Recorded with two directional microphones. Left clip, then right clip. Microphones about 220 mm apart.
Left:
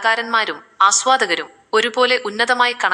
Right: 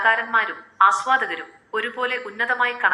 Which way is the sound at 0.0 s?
55° left (ahead or behind).